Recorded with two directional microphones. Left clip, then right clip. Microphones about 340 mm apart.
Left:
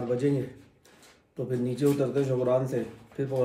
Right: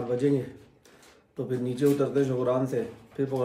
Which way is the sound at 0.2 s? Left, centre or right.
Centre.